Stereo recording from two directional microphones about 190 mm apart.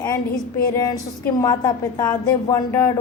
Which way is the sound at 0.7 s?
20° left (ahead or behind).